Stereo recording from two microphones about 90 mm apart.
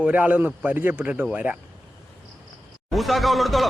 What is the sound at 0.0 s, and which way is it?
A man's voice, 15° right (ahead or behind).